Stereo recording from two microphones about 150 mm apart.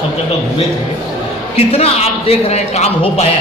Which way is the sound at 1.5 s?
45° left (ahead or behind).